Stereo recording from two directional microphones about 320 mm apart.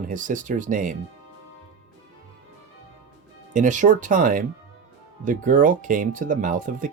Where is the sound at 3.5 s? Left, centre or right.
Right.